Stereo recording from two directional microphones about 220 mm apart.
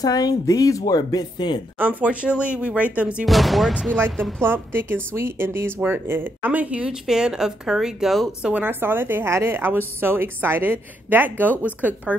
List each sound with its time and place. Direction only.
0.0 s a woman's voice: 15° left (ahead or behind)
1.8 s a woman's voice: 5° right (ahead or behind)